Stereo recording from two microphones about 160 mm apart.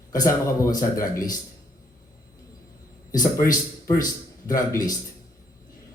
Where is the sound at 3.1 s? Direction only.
20° left (ahead or behind).